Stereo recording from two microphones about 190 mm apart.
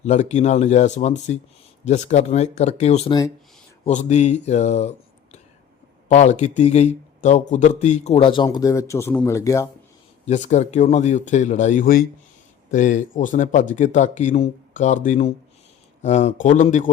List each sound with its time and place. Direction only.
0.0 s speech: 35° left (ahead or behind)
3.1 s speech: 20° left (ahead or behind)
3.8 s speech: 35° left (ahead or behind)
8.4 s speech: 15° left (ahead or behind)
10.2 s speech: 40° left (ahead or behind)